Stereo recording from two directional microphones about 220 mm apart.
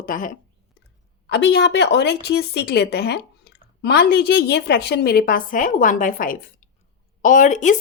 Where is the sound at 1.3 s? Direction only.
50° left (ahead or behind).